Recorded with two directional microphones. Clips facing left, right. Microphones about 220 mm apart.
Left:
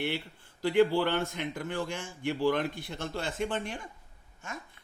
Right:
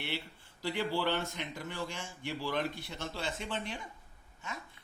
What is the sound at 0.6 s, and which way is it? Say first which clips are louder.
A man's voice: left 9 dB; 55° left (ahead or behind).